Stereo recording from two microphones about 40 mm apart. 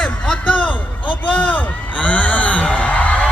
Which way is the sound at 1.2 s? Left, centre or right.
Left.